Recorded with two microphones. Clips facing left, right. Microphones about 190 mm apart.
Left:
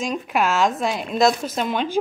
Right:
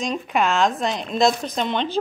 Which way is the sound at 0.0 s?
5° left (ahead or behind).